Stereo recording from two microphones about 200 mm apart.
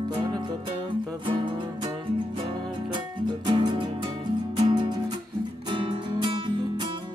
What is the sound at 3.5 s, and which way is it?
Music, 25° right (ahead or behind).